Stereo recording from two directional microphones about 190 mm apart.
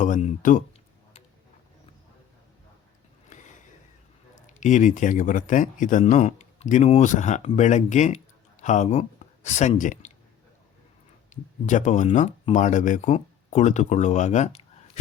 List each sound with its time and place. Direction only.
0.0 s speech: 40° left (ahead or behind)
3.2 s a sound: 40° left (ahead or behind)
4.4 s a man's voice: 40° left (ahead or behind)
11.6 s a man's voice: 40° left (ahead or behind)